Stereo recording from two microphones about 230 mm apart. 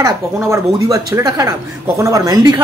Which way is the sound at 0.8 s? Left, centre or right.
Centre.